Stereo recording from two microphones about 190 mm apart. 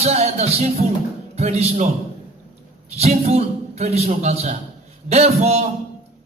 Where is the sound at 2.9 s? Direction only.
35° right (ahead or behind).